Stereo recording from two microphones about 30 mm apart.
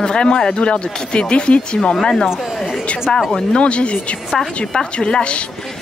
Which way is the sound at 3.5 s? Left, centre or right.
Left.